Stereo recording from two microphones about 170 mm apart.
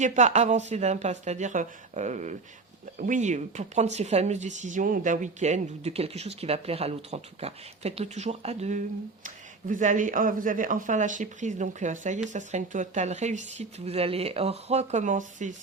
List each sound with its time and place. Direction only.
0.0 s speech: 40° right (ahead or behind)